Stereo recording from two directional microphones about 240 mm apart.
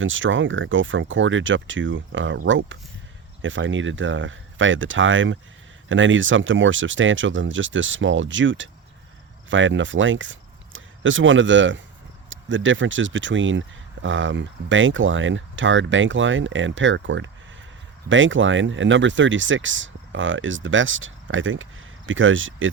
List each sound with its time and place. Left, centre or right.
0.0 s speech: right